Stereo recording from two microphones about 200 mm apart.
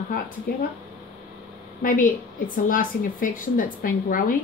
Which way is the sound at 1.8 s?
45° left (ahead or behind).